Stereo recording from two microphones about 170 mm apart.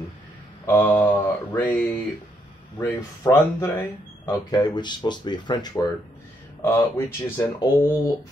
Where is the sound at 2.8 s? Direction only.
15° left (ahead or behind).